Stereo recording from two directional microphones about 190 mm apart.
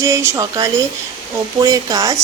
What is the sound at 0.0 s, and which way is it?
A woman's voice, 15° right (ahead or behind).